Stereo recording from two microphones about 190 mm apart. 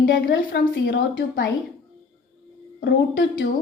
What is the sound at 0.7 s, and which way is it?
Speech, 75° left (ahead or behind).